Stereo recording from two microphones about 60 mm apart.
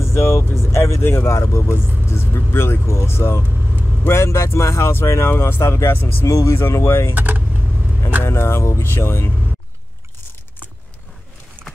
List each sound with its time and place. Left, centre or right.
0.0 s speech: left
6.2 s speech: left
7.2 s vehicle: right
8.2 s speech: left
11.6 s a sound: right